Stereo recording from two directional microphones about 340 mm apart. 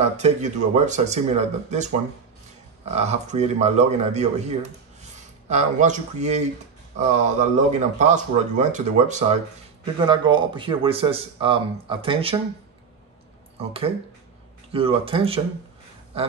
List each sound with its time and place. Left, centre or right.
0.2 s speech: centre
13.6 s speech: centre